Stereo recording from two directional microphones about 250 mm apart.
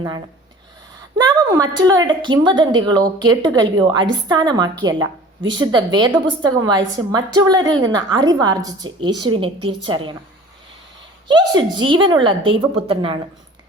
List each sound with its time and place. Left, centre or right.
1.2 s a woman's voice: centre
11.3 s speech: centre